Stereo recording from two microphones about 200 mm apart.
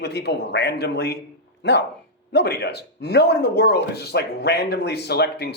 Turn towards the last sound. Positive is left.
turn(degrees=55)  # may be behind; listen again after turning